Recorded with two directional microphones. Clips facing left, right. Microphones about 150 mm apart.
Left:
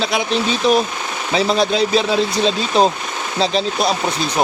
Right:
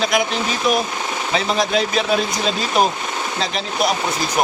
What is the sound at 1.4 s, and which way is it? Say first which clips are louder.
Speech: left 4 dB; 30° left (ahead or behind).